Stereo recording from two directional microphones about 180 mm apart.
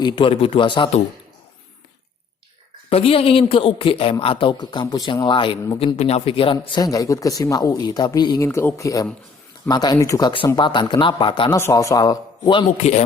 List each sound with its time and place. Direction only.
0.0 s speech: 30° left (ahead or behind)
2.9 s speech: 30° left (ahead or behind)
6.8 s speech: 20° left (ahead or behind)
11.5 s speech: 15° left (ahead or behind)
12.7 s speech: 40° left (ahead or behind)